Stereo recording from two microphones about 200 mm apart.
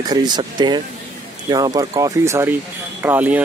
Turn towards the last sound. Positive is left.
turn(degrees=-10)  # may be behind; listen again after turning